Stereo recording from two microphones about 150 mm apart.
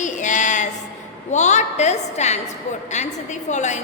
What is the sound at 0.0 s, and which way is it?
Music, 55° left (ahead or behind).